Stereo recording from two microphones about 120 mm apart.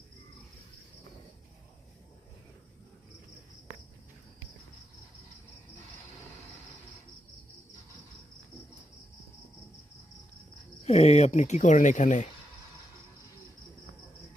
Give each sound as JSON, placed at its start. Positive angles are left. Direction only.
{"t": 10.8, "sound": "speech", "side_deg": 60}